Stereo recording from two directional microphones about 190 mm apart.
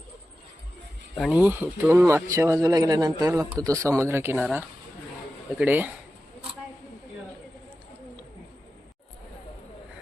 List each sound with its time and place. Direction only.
1.1 s speech: centre (ahead or behind)
5.5 s speech: 10° right (ahead or behind)